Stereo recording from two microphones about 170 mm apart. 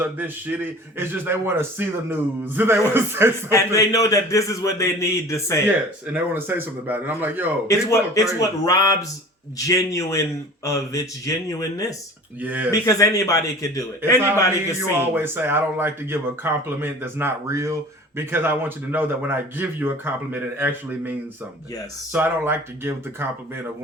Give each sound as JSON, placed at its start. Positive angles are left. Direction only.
{"t": 0.0, "sound": "a man's voice", "side_deg": -10}
{"t": 3.5, "sound": "a man's voice", "side_deg": 20}
{"t": 6.1, "sound": "a man's voice", "side_deg": -10}
{"t": 7.7, "sound": "a man's voice", "side_deg": 15}
{"t": 12.4, "sound": "a man's voice", "side_deg": -10}
{"t": 12.8, "sound": "a man's voice", "side_deg": 20}
{"t": 14.8, "sound": "a man's voice", "side_deg": -10}